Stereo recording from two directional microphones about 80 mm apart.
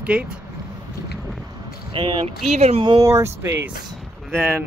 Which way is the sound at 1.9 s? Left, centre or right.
Right.